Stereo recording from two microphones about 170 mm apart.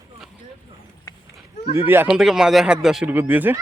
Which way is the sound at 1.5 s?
35° left (ahead or behind).